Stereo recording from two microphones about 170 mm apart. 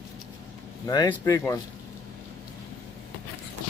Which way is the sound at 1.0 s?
15° left (ahead or behind).